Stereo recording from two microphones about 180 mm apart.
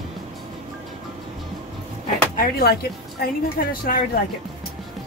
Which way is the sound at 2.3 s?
60° left (ahead or behind).